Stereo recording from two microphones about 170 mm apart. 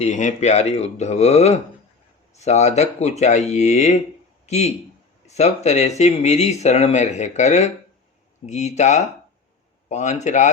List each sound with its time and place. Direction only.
0.0 s speech: 45° left (ahead or behind)